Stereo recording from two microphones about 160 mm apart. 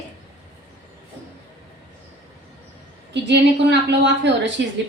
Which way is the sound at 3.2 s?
90° right.